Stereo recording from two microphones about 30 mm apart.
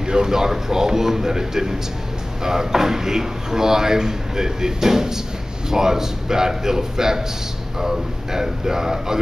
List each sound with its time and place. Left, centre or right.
0.0 s speech: right